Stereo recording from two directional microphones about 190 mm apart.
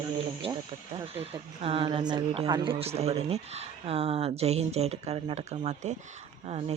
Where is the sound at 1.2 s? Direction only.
30° right (ahead or behind).